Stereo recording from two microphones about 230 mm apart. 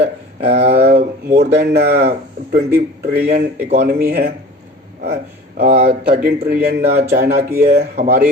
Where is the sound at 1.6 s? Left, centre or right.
Right.